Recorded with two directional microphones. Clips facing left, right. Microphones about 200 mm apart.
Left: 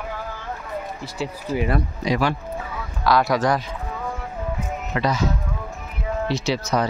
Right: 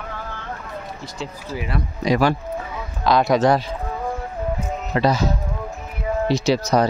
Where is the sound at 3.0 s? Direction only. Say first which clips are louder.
Right 3 dB; 20° right (ahead or behind).